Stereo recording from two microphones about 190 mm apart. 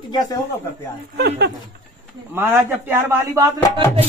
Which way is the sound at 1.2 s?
60° right (ahead or behind).